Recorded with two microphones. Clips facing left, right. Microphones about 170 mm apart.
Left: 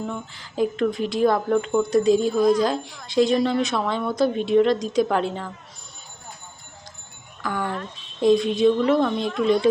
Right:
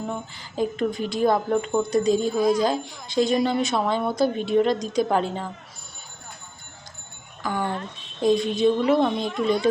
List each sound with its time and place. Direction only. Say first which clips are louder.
0.3 s speech: left 3 dB; centre (ahead or behind)
7.6 s speech: even; 30° right (ahead or behind)
8.2 s speech: left 2 dB; centre (ahead or behind)